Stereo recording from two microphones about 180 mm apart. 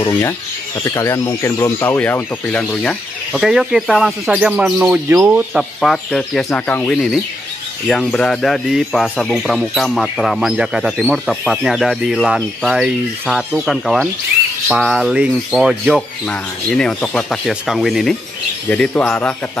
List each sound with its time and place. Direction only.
0.0 s speech: 15° left (ahead or behind)